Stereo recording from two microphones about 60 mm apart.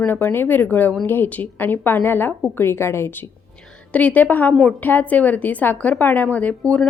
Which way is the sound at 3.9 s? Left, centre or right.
Left.